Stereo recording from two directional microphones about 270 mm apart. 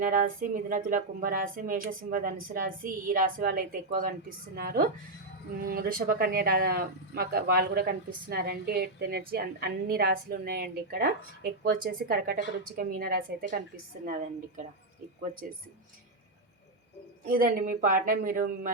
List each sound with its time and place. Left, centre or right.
0.0 s a woman's voice: right
17.2 s speech: right